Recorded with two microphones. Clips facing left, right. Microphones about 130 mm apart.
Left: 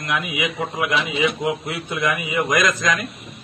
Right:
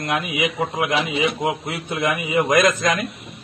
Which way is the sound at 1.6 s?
30° right (ahead or behind).